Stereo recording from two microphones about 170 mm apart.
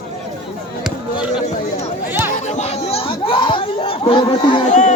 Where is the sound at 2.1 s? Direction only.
10° right (ahead or behind).